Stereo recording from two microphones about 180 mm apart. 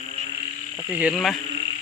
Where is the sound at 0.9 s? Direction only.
5° right (ahead or behind).